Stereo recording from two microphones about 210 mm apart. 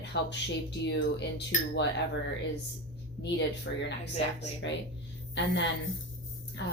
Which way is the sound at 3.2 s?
55° left (ahead or behind).